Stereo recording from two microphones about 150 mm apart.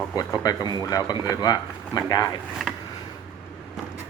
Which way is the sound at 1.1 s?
15° right (ahead or behind).